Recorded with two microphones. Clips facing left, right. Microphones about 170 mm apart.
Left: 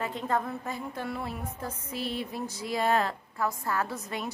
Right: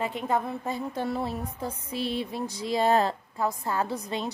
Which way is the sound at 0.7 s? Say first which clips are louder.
Right 5 dB; 30° right (ahead or behind).